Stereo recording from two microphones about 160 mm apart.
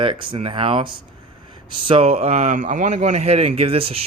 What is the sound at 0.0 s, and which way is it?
Speech, 30° right (ahead or behind).